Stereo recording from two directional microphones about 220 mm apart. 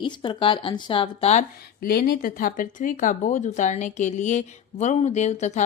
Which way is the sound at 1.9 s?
45° left (ahead or behind).